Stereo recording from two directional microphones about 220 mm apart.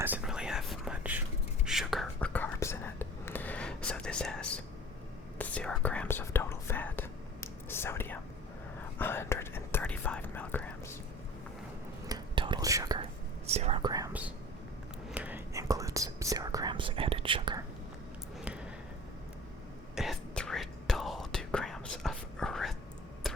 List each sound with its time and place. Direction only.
0.0 s whispering: 5° right (ahead or behind)
12.0 s whispering: 20° right (ahead or behind)
13.5 s whispering: 30° right (ahead or behind)
20.0 s whispering: centre (ahead or behind)
23.2 s a sound: centre (ahead or behind)